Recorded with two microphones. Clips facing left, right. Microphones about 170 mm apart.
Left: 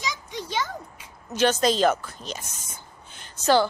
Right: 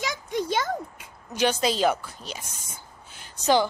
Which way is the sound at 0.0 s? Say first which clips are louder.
Right 5 dB; 50° right (ahead or behind).